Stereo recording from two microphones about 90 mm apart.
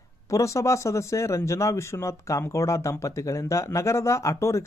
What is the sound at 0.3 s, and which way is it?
A man's voice, 35° left (ahead or behind).